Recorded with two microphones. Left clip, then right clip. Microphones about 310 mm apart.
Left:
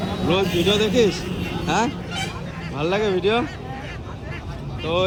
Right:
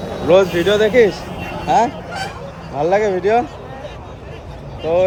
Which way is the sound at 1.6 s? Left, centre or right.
Centre.